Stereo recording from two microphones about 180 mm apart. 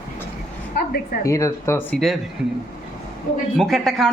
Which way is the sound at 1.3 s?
15° left (ahead or behind).